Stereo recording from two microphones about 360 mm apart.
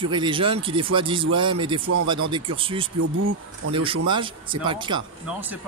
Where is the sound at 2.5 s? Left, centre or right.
Centre.